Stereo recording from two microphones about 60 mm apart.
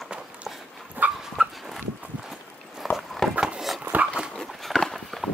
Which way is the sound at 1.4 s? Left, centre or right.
Centre.